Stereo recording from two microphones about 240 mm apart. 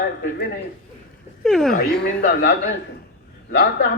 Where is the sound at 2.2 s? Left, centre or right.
Left.